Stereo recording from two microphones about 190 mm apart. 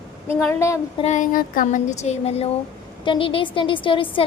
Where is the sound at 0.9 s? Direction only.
40° left (ahead or behind).